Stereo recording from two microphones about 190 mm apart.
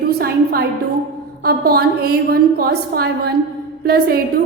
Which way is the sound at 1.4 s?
50° right (ahead or behind).